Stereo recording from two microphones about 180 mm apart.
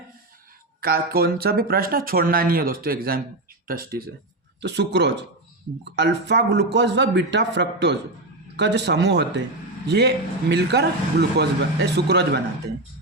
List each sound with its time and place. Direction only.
0.8 s speech: 55° right (ahead or behind)
4.6 s a man's voice: 70° right (ahead or behind)